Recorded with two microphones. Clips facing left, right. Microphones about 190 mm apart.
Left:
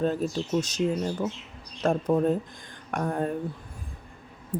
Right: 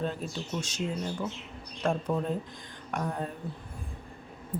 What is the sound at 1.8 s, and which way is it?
Speech, 40° left (ahead or behind).